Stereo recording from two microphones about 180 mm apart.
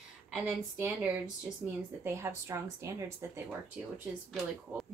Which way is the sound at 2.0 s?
15° right (ahead or behind).